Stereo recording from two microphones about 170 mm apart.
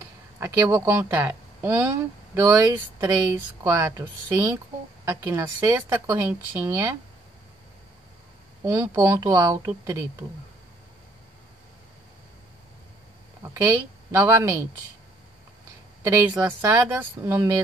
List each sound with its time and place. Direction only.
0.4 s speech: 15° right (ahead or behind)
5.0 s speech: 15° right (ahead or behind)
8.6 s speech: 15° right (ahead or behind)
13.4 s speech: 15° right (ahead or behind)
16.0 s speech: 15° right (ahead or behind)